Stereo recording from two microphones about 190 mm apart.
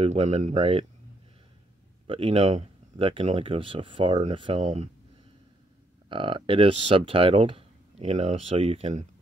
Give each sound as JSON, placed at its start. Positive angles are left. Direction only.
{"t": 0.0, "sound": "speech", "side_deg": -35}
{"t": 2.0, "sound": "speech", "side_deg": -30}
{"t": 6.0, "sound": "speech", "side_deg": -25}